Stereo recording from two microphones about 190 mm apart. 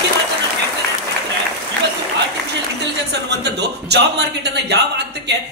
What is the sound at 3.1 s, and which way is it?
Speech, 60° right (ahead or behind).